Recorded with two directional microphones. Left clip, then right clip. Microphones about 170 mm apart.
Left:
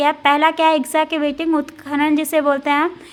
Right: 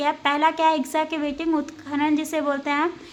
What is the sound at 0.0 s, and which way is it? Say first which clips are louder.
A woman's voice: left 6 dB; 30° left (ahead or behind).